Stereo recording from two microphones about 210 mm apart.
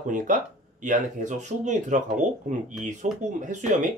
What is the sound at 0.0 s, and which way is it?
Speech, 40° right (ahead or behind).